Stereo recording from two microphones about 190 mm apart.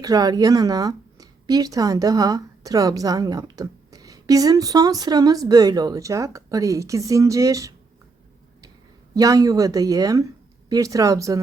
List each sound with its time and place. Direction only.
0.0 s speech: 20° right (ahead or behind)
9.1 s speech: 20° right (ahead or behind)